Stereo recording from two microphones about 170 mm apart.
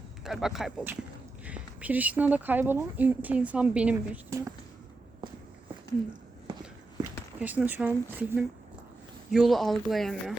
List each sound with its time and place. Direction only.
0.3 s speech: 5° right (ahead or behind)
4.3 s speech: 20° right (ahead or behind)
7.3 s speech: 10° right (ahead or behind)